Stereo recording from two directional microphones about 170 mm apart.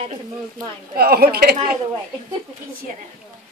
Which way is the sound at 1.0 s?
65° right (ahead or behind).